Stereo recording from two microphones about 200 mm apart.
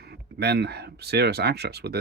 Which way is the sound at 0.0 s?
55° right (ahead or behind).